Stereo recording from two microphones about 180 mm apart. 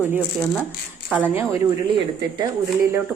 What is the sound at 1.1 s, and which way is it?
Speech, 10° right (ahead or behind).